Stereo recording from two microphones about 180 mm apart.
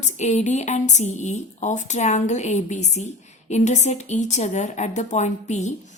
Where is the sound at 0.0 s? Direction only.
40° left (ahead or behind).